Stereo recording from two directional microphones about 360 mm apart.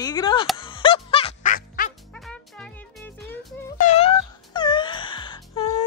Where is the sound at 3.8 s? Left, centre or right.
Centre.